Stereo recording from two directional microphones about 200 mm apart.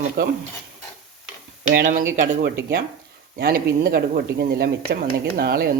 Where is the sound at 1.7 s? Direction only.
45° right (ahead or behind).